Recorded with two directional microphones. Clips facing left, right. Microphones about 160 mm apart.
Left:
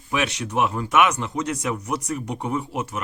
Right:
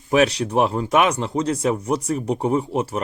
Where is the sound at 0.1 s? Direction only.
40° right (ahead or behind).